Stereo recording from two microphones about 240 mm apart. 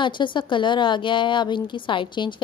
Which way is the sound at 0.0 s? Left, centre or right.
Centre.